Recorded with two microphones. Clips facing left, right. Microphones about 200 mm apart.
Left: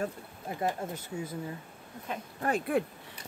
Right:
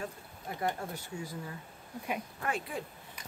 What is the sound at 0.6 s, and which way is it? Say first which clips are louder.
Speech: left 2 dB; 20° left (ahead or behind).